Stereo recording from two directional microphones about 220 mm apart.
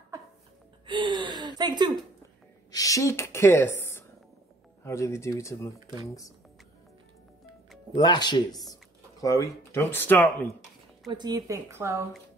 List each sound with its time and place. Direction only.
0.8 s a sound: 20° right (ahead or behind)
2.7 s a woman's voice: 15° left (ahead or behind)
5.8 s speech: 15° right (ahead or behind)
6.0 s speech: 15° left (ahead or behind)
7.9 s speech: 20° left (ahead or behind)
11.1 s speech: 20° right (ahead or behind)